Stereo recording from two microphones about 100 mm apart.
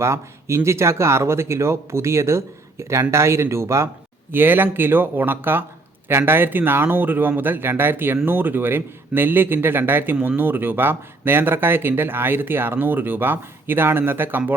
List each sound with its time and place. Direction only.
0.0 s speech: 25° right (ahead or behind)